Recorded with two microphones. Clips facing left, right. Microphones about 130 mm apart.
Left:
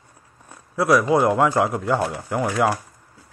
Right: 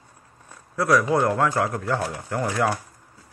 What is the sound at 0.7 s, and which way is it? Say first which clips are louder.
Speech: left 3 dB; 10° left (ahead or behind).